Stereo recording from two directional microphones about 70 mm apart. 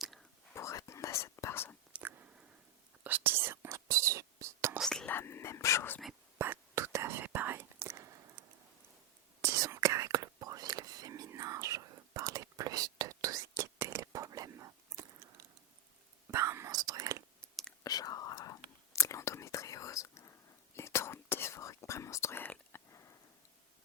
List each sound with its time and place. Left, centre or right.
0.5 s whispering: left
1.9 s a sound: right
3.0 s whispering: right
4.8 s whispering: centre
5.0 s whispering: left
6.4 s whispering: right
9.7 s whispering: right
11.3 s whispering: right
14.5 s a sound: right
16.3 s whispering: right
16.6 s whispering: right
17.8 s whispering: left
22.4 s whispering: left